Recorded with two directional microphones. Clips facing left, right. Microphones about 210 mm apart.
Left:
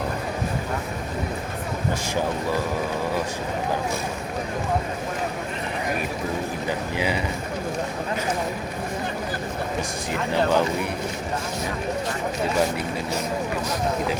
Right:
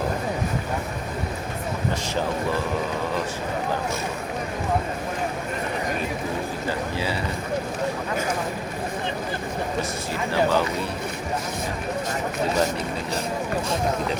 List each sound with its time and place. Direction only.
6.7 s speech: 15° left (ahead or behind)
10.1 s speech: 15° left (ahead or behind)